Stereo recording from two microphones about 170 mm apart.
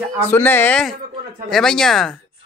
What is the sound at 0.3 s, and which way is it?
Speech, 10° left (ahead or behind).